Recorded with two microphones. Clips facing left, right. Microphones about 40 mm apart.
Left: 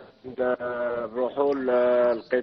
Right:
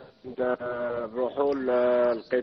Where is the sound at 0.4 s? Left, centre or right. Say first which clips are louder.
Left 2 dB; centre.